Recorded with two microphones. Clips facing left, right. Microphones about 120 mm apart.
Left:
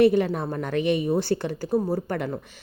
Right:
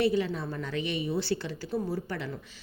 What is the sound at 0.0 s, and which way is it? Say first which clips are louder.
Speech: left 8 dB; 55° left (ahead or behind).